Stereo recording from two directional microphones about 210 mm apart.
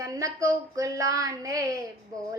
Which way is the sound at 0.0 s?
15° right (ahead or behind).